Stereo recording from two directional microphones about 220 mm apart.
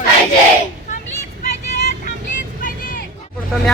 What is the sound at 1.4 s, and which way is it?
Vehicle, 30° left (ahead or behind).